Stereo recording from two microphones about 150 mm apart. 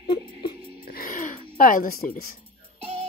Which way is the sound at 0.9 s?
70° left (ahead or behind).